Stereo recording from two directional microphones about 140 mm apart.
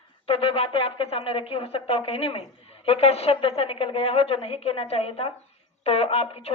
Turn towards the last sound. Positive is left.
turn(degrees=45)  # may be behind; listen again after turning